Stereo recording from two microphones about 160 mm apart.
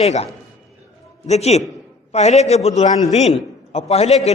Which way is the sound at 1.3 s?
40° left (ahead or behind).